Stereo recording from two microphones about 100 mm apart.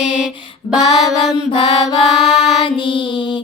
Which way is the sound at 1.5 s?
65° left (ahead or behind).